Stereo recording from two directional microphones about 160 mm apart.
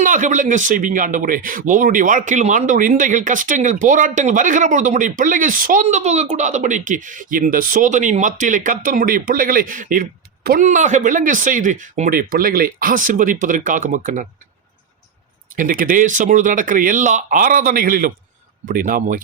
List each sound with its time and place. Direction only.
0.0 s speech: 50° right (ahead or behind)
6.0 s speech: 45° right (ahead or behind)
15.5 s speech: 60° right (ahead or behind)